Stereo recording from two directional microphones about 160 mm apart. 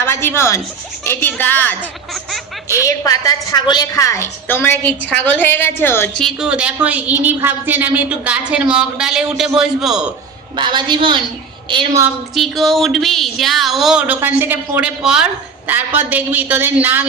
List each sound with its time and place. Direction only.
0.0 s a woman's voice: 15° left (ahead or behind)
2.8 s a woman's voice: 20° left (ahead or behind)
6.2 s a man's voice: 5° right (ahead or behind)
10.6 s a man's voice: 30° right (ahead or behind)
12.3 s speech: centre (ahead or behind)